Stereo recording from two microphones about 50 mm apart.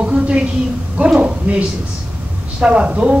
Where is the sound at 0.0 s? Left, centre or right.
Right.